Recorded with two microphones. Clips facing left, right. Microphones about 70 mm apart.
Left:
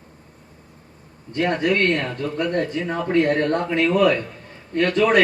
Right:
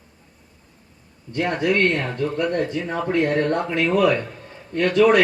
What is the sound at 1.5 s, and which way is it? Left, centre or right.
A man's voice, right.